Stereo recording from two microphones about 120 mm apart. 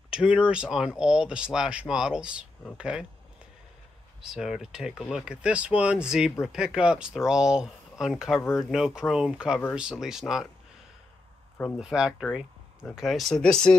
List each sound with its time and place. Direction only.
0.1 s speech: 10° right (ahead or behind)
4.2 s speech: 5° right (ahead or behind)
8.4 s speech: 20° left (ahead or behind)
8.7 s speech: 5° right (ahead or behind)
11.7 s speech: 5° right (ahead or behind)